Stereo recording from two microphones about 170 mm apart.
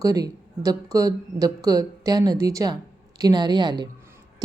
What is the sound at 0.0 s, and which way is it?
A woman's voice, 20° right (ahead or behind).